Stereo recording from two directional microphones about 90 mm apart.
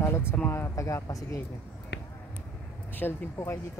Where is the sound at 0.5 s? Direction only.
30° left (ahead or behind).